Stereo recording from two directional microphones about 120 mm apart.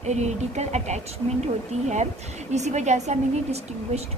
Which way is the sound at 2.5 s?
70° right (ahead or behind).